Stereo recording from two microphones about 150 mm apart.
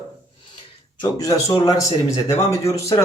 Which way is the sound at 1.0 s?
25° left (ahead or behind).